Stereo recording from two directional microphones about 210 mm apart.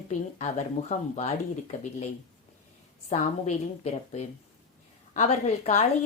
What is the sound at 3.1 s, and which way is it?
A woman's voice, 30° left (ahead or behind).